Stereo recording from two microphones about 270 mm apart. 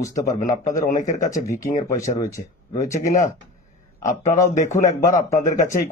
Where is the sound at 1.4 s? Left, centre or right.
Centre.